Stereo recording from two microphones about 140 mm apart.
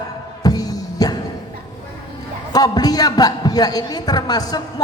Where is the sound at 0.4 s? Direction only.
25° left (ahead or behind).